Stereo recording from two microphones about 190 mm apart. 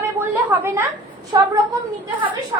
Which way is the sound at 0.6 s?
15° right (ahead or behind).